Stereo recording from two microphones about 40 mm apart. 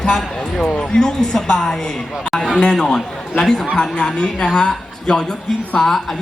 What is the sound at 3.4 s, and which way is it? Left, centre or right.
Speech, centre.